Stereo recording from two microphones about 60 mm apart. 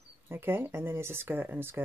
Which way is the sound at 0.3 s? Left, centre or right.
Right.